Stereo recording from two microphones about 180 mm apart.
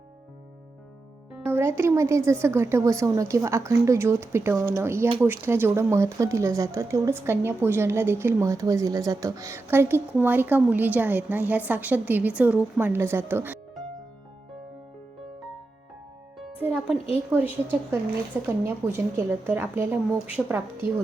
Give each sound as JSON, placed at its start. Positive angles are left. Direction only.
{"t": 1.5, "sound": "speech", "side_deg": -15}
{"t": 16.4, "sound": "music", "side_deg": -5}
{"t": 17.2, "sound": "speech", "side_deg": -10}